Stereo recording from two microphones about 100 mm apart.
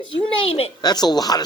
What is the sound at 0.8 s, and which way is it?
Speech, 45° left (ahead or behind).